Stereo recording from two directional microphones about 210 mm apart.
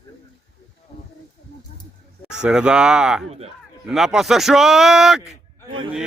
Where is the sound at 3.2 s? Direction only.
30° right (ahead or behind).